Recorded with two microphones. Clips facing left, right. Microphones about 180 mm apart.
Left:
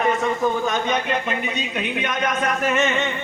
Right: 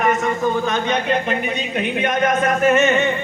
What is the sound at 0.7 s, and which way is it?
A man's voice, 55° right (ahead or behind).